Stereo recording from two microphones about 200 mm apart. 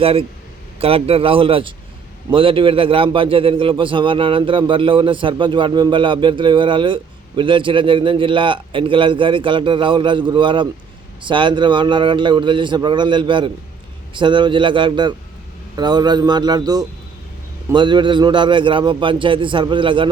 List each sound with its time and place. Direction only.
0.0 s a man's voice: 30° right (ahead or behind)